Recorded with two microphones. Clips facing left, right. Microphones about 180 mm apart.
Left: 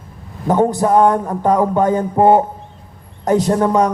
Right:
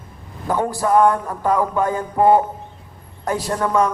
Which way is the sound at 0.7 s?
20° left (ahead or behind).